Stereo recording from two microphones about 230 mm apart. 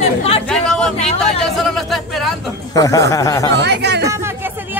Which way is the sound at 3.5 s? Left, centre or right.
Right.